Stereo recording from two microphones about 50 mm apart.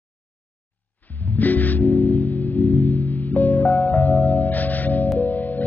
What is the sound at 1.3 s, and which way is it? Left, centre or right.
Music, left.